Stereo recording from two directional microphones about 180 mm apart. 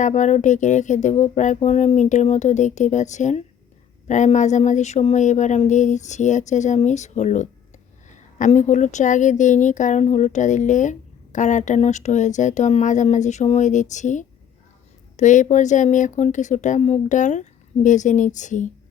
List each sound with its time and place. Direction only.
0.0 s speech: 40° left (ahead or behind)